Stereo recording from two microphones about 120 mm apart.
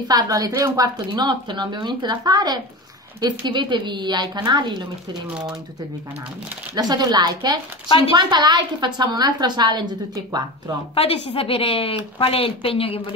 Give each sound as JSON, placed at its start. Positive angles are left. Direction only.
{"t": 0.1, "sound": "a woman's voice", "side_deg": -30}
{"t": 6.7, "sound": "a woman's voice", "side_deg": -35}
{"t": 11.0, "sound": "a woman's voice", "side_deg": 55}